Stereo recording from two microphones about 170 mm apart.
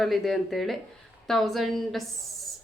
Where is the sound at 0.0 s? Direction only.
Centre (ahead or behind).